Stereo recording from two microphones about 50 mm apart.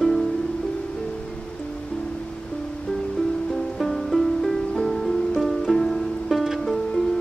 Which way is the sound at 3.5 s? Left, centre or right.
Centre.